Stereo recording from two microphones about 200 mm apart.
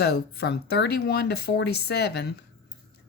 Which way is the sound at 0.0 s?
55° left (ahead or behind).